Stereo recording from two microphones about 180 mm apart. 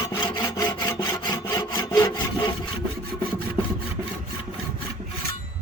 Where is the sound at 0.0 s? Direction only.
25° left (ahead or behind).